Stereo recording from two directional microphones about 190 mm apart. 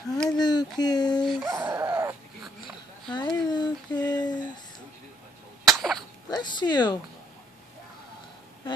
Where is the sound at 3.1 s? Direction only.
25° left (ahead or behind).